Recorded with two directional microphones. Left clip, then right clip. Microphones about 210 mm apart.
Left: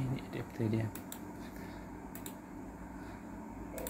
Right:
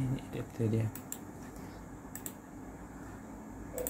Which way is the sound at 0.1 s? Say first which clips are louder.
Right 1 dB; 15° right (ahead or behind).